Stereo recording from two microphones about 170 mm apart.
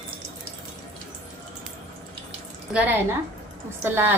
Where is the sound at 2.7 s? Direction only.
5° right (ahead or behind).